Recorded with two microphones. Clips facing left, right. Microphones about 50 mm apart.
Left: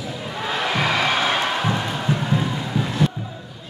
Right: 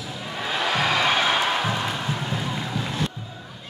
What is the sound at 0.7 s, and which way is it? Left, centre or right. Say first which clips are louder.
Music: left 1 dB; centre.